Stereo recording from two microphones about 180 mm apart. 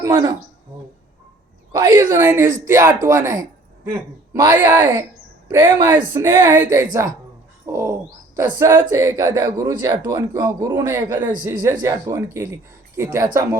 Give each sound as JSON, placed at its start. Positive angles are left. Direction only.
{"t": 0.0, "sound": "speech", "side_deg": -15}
{"t": 1.8, "sound": "speech", "side_deg": -15}